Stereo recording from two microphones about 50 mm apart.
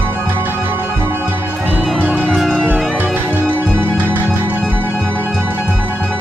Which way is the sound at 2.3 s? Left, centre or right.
Centre.